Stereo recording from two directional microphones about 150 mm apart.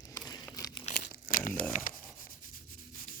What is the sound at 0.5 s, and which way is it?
Crumpling, 25° left (ahead or behind).